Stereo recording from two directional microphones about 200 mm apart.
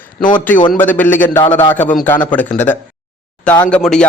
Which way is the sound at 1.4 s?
25° left (ahead or behind).